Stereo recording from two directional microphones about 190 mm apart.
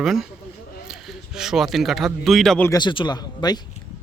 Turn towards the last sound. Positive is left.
turn(degrees=20)  # may be behind; listen again after turning